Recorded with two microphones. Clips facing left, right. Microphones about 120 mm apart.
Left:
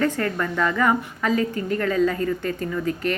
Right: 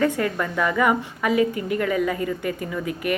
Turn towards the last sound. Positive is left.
turn(degrees=-15)  # may be behind; listen again after turning